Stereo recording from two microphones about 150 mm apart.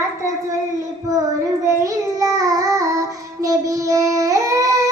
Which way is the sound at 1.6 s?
20° right (ahead or behind).